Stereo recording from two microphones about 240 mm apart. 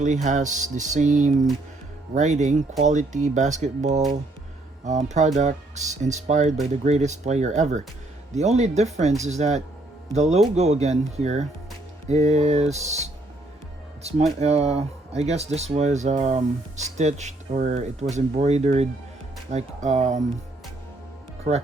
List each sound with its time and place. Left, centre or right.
0.0 s speech: right
21.5 s speech: right